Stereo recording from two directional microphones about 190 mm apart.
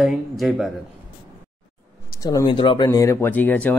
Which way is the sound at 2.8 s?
15° left (ahead or behind).